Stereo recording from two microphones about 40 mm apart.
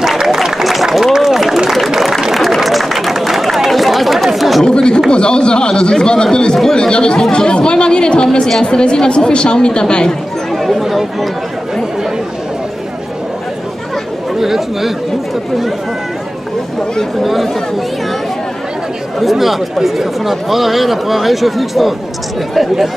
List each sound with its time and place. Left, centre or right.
0.0 s a sound: centre
4.6 s a sound: left
6.7 s chatter: left
7.3 s a woman's voice: left
10.5 s chatter: centre
14.4 s speech: centre
17.2 s speech: centre
19.1 s speech: centre